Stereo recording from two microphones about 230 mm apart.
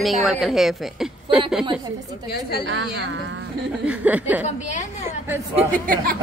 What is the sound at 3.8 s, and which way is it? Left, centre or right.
Speech, centre.